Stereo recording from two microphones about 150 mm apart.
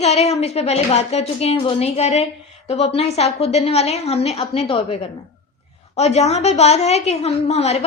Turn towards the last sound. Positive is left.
turn(degrees=45)  # may be behind; listen again after turning